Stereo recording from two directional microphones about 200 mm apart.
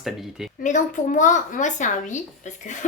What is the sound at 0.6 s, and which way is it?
Speech, 40° left (ahead or behind).